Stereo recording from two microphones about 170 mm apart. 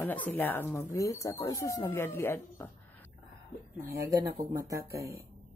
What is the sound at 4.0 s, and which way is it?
Speech, 20° right (ahead or behind).